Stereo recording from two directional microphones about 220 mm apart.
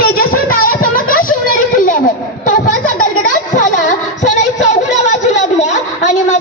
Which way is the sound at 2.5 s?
35° left (ahead or behind).